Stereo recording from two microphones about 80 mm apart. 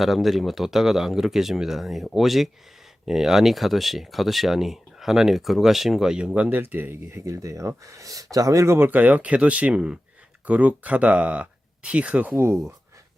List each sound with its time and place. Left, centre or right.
0.0 s speech: centre